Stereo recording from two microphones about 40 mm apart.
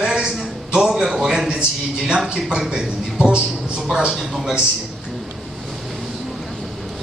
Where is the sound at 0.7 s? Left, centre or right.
Centre.